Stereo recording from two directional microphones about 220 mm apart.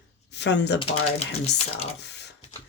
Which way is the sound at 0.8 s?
25° left (ahead or behind).